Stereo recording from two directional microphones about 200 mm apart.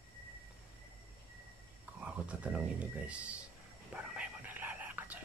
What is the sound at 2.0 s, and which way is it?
Speech, 5° right (ahead or behind).